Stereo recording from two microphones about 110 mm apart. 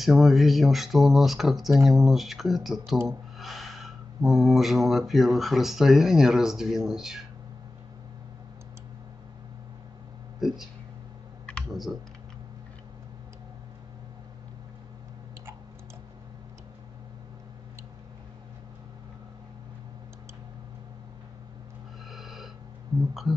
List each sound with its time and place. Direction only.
0.0 s speech: centre (ahead or behind)
10.4 s speech: 5° right (ahead or behind)
22.1 s a sound: centre (ahead or behind)